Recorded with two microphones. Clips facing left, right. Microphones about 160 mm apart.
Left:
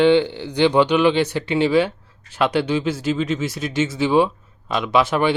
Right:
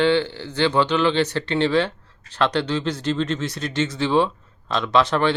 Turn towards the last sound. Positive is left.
turn(degrees=10)  # may be behind; listen again after turning